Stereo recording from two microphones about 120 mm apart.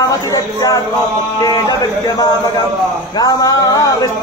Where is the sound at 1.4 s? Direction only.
35° left (ahead or behind).